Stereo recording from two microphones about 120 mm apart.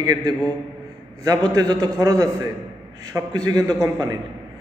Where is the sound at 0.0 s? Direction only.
35° right (ahead or behind).